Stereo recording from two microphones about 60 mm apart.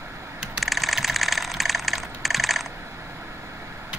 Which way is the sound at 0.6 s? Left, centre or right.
Centre.